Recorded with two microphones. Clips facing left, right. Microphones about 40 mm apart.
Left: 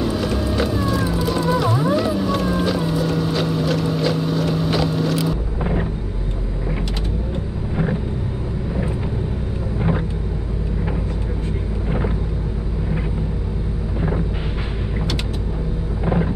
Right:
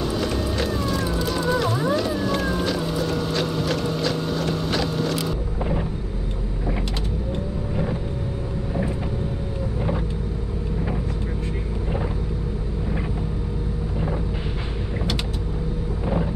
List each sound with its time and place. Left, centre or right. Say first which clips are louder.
0.0 s music: left 3 dB; centre
5.6 s vehicle: left 2 dB; left
9.8 s vehicle: left 5 dB; left